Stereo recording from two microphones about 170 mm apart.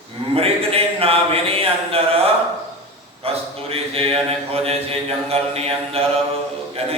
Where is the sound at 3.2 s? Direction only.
35° right (ahead or behind).